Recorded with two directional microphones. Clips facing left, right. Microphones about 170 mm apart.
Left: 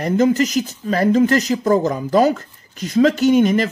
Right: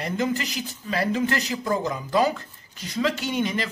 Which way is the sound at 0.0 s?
40° left (ahead or behind).